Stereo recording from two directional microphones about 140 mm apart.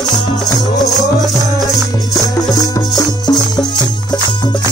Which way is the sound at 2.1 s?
25° left (ahead or behind).